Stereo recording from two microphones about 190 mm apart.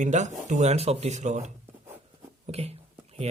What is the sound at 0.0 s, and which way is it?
Speech, 40° right (ahead or behind).